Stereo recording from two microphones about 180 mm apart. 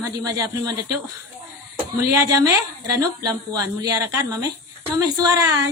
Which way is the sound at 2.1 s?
15° right (ahead or behind).